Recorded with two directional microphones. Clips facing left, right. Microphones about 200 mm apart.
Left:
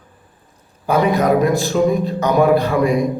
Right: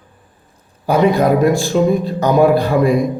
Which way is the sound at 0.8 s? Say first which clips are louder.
Right 2 dB; 30° right (ahead or behind).